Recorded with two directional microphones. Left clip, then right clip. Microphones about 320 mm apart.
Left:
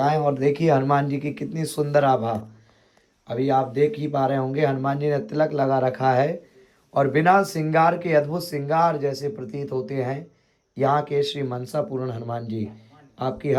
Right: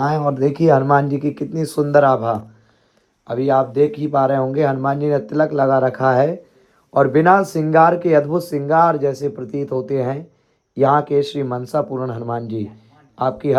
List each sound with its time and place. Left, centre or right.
0.3 s speech: centre
3.4 s speech: right
3.8 s speech: centre